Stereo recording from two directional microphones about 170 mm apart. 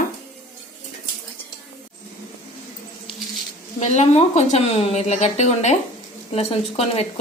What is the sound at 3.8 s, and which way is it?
A woman's voice, 40° left (ahead or behind).